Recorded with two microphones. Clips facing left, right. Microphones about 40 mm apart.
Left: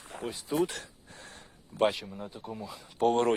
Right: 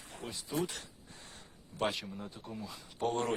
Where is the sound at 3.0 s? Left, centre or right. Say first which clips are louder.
Left 8 dB; left.